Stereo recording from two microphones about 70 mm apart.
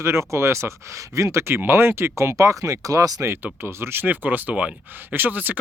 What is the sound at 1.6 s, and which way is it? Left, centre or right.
Speech, right.